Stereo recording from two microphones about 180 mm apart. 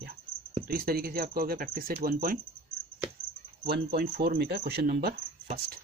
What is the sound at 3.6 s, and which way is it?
Speech, 60° right (ahead or behind).